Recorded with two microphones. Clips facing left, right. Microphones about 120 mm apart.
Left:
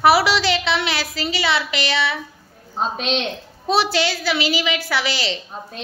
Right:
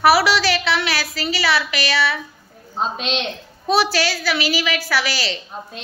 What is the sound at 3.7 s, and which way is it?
A child's voice, 25° left (ahead or behind).